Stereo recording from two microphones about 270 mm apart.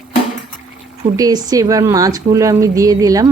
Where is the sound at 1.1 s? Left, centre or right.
Centre.